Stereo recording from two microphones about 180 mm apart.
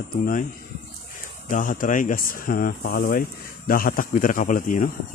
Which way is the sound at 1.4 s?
50° left (ahead or behind).